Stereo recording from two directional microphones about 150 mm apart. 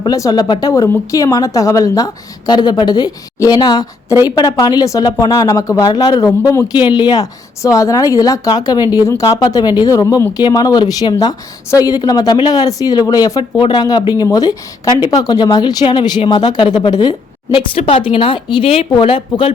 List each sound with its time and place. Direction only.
0.0 s speech: 25° left (ahead or behind)